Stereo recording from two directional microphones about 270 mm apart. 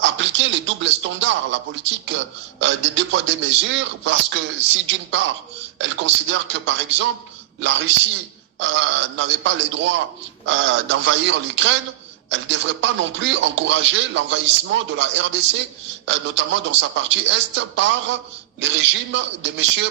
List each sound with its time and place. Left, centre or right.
0.0 s a man's voice: right